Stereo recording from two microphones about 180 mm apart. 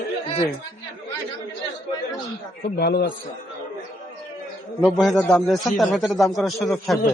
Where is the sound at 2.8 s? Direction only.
60° left (ahead or behind).